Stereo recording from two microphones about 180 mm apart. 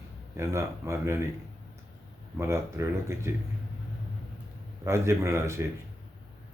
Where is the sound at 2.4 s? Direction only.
15° right (ahead or behind).